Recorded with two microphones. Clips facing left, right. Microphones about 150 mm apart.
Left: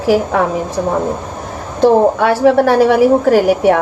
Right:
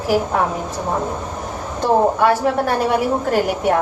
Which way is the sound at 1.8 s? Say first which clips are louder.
Left 5 dB; 75° left (ahead or behind).